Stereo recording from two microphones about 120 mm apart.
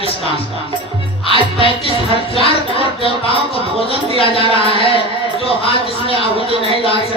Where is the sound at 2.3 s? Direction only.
50° left (ahead or behind).